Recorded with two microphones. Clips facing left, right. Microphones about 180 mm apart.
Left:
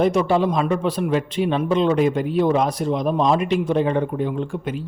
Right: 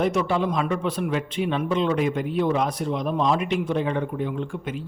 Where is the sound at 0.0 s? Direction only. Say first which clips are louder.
Left 5 dB; 35° left (ahead or behind).